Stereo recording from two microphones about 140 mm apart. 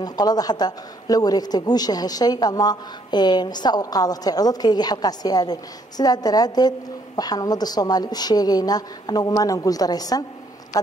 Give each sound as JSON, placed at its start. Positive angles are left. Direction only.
{"t": 0.0, "sound": "speech", "side_deg": 30}